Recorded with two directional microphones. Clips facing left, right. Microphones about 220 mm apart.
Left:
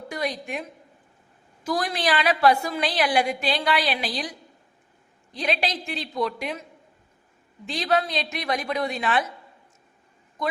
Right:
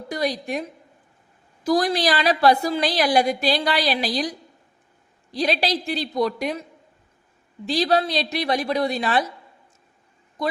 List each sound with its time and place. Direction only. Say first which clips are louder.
0.1 s a woman's voice: right 5 dB; 35° right (ahead or behind)
1.6 s a woman's voice: right 6 dB; 35° right (ahead or behind)